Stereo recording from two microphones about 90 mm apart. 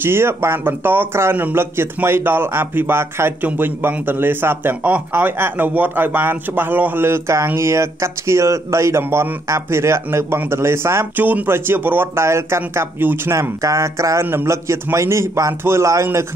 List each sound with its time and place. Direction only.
0.0 s a man's voice: 25° right (ahead or behind)